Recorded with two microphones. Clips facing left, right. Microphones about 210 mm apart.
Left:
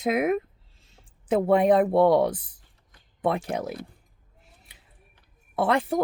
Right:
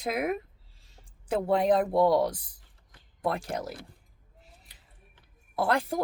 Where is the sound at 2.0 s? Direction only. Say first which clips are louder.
Left 4 dB; 65° left (ahead or behind).